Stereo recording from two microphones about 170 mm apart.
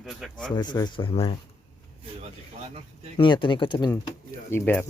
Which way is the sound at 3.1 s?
30° left (ahead or behind).